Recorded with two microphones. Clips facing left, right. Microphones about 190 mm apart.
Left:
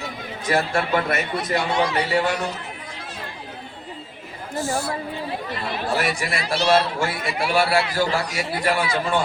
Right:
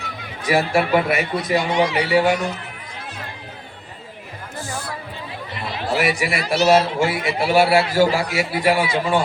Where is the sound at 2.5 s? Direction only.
60° right (ahead or behind).